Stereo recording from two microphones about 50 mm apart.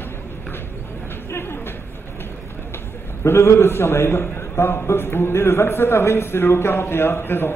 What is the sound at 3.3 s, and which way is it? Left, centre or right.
A man's voice, left.